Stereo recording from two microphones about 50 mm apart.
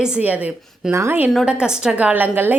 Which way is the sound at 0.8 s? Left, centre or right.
Centre.